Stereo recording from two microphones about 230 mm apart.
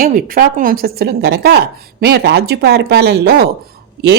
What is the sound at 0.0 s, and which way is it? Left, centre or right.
A woman's voice, right.